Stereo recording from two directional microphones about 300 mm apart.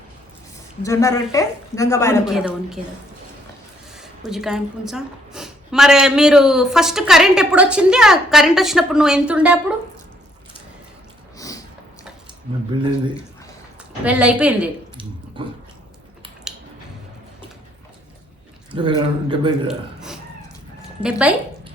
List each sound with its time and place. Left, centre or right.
0.8 s a woman's voice: centre
2.2 s a woman's voice: centre
4.3 s a woman's voice: centre
14.0 s a woman's voice: centre
16.5 s a sound: centre
18.7 s speech: centre
19.6 s a sound: centre
21.0 s a woman's voice: centre